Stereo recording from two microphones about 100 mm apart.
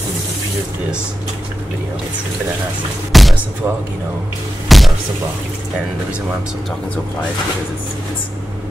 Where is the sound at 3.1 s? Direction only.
Centre (ahead or behind).